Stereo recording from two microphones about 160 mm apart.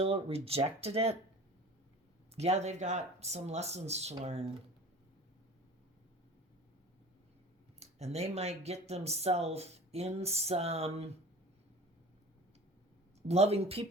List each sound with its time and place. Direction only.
0.0 s speech: 40° right (ahead or behind)
2.3 s speech: 40° right (ahead or behind)
7.8 s speech: 45° right (ahead or behind)
13.2 s speech: 40° right (ahead or behind)